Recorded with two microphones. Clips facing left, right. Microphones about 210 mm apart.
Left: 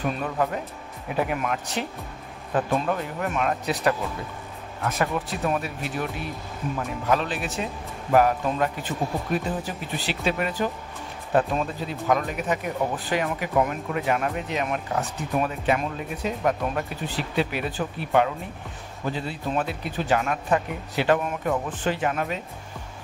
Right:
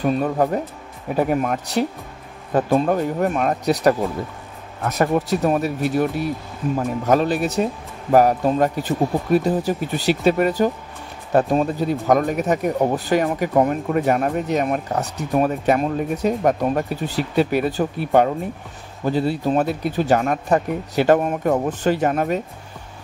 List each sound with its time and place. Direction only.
0.2 s speech: 40° right (ahead or behind)